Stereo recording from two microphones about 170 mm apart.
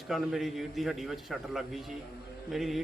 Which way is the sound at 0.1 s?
Centre (ahead or behind).